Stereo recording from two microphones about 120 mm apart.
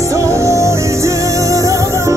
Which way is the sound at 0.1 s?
25° right (ahead or behind).